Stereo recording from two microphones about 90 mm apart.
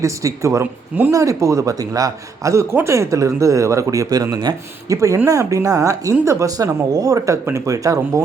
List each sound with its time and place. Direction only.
0.0 s speech: 35° right (ahead or behind)
4.9 s speech: 35° right (ahead or behind)